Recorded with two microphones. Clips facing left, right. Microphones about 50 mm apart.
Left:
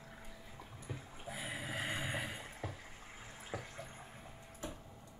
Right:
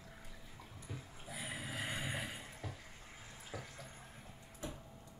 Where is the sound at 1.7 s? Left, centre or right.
Left.